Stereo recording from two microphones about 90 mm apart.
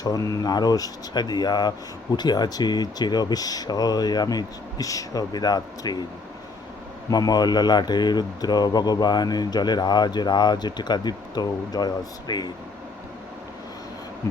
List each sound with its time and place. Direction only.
0.0 s speech: 45° left (ahead or behind)
7.1 s speech: 45° left (ahead or behind)